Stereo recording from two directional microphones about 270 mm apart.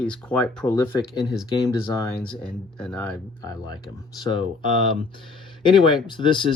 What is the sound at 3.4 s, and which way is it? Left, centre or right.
Speech, centre.